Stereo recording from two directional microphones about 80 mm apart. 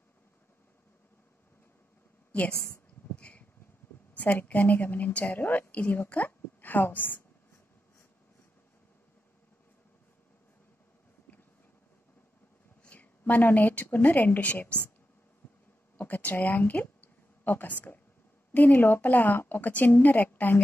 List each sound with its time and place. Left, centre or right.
2.6 s a sound: left
4.1 s a woman's voice: left
12.8 s a woman's voice: centre
16.0 s a woman's voice: left